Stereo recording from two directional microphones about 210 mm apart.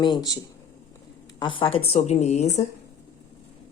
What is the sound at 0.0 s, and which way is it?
Speech, 20° left (ahead or behind).